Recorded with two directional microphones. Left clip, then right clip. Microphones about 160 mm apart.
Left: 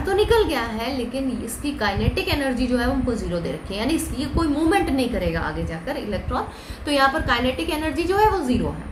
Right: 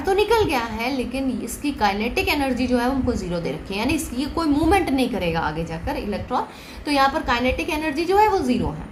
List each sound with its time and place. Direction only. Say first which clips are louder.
0.0 s a woman's voice: even; 45° right (ahead or behind)